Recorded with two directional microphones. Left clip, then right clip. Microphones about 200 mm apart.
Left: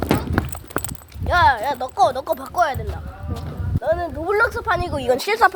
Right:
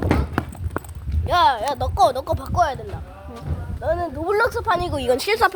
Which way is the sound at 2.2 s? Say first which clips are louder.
Left 1 dB; centre (ahead or behind).